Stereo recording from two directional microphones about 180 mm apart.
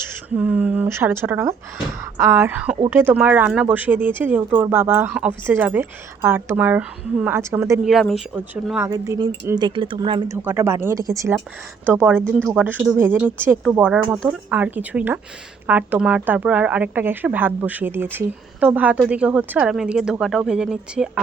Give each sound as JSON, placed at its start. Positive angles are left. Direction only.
{"t": 0.0, "sound": "speech", "side_deg": -10}
{"t": 7.9, "sound": "speech", "side_deg": 0}
{"t": 8.8, "sound": "speech", "side_deg": -20}
{"t": 10.2, "sound": "speech", "side_deg": -15}